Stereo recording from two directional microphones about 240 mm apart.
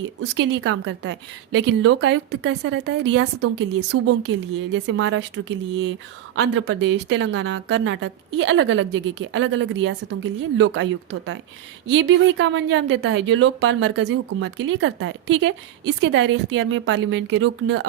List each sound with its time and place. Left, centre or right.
0.0 s a woman's voice: right